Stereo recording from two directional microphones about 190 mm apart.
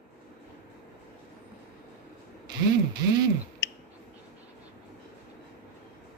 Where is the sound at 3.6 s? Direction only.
65° left (ahead or behind).